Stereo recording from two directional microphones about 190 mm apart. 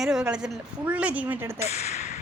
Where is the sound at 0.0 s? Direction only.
5° right (ahead or behind).